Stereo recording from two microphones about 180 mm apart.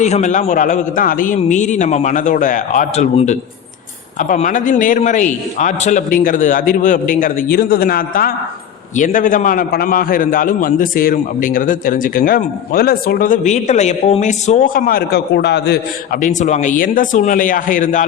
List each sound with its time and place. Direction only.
0.0 s a man's voice: 40° left (ahead or behind); by 15.8 s 70° left (ahead or behind)
16.2 s a man's voice: 40° left (ahead or behind)